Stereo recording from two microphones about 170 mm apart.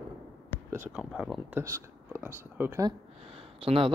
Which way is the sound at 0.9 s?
5° right (ahead or behind).